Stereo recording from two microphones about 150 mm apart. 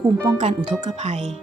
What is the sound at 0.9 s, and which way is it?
Speech, 45° right (ahead or behind).